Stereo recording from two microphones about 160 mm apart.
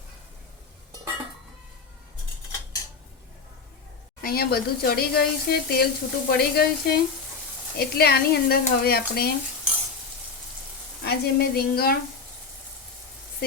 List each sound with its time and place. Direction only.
4.2 s speech: 70° left (ahead or behind)
11.0 s speech: 80° left